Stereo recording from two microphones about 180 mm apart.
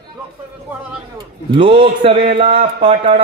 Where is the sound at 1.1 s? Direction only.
30° right (ahead or behind).